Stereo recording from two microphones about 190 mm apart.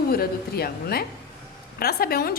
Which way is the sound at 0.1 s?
55° left (ahead or behind).